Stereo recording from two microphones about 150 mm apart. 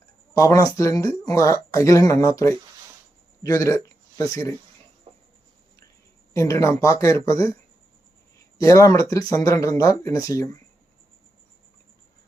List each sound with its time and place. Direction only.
0.3 s speech: 25° left (ahead or behind)
6.3 s speech: 20° left (ahead or behind)
8.5 s speech: 20° left (ahead or behind)